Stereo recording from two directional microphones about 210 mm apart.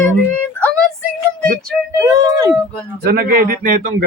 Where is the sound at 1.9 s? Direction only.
15° right (ahead or behind).